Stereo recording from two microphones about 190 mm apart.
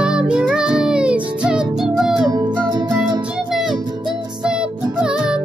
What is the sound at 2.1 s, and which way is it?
Music, 20° right (ahead or behind).